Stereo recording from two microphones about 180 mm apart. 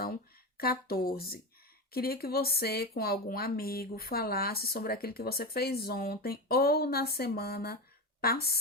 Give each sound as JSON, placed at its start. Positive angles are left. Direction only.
{"t": 0.0, "sound": "speech", "side_deg": 55}